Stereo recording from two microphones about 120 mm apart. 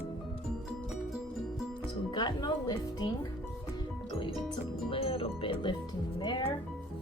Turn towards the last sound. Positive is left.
turn(degrees=40)  # may be behind; listen again after turning